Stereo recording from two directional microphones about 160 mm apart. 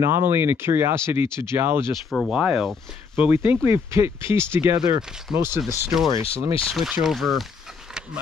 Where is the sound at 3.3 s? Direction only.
15° right (ahead or behind).